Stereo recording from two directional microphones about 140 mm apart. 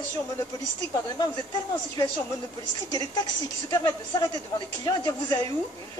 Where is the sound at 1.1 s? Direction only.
30° left (ahead or behind).